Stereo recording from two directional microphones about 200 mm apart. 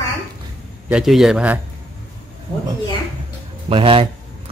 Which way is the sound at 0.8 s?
5° right (ahead or behind).